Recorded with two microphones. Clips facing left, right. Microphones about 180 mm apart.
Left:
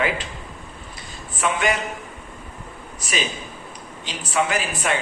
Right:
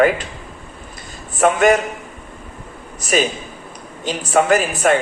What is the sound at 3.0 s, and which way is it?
Speech, 50° right (ahead or behind).